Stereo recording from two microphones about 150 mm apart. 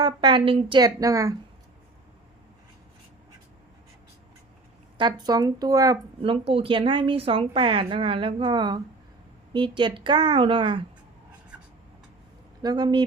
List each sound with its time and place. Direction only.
0.0 s a woman's voice: 30° right (ahead or behind)
4.9 s a woman's voice: 30° right (ahead or behind)
6.2 s speech: 35° right (ahead or behind)
12.6 s a woman's voice: 30° right (ahead or behind)